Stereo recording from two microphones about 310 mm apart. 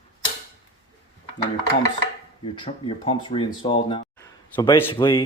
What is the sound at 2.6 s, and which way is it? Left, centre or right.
Speech, centre.